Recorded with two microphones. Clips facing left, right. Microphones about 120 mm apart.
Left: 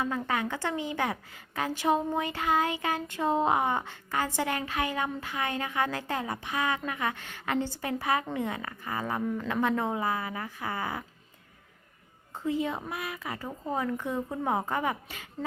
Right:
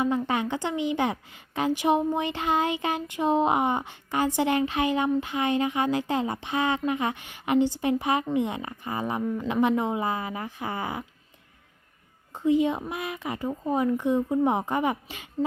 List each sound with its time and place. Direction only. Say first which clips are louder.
0.0 s speech: right 5 dB; 20° right (ahead or behind)
12.3 s a woman's voice: right 7 dB; 15° right (ahead or behind)